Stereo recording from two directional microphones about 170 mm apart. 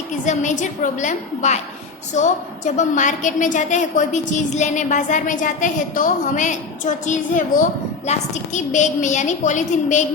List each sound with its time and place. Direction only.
0.3 s a woman's voice: 45° left (ahead or behind)
2.7 s a woman's voice: 45° left (ahead or behind)